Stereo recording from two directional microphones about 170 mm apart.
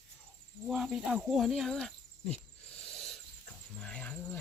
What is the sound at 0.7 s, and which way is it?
Speech, centre (ahead or behind).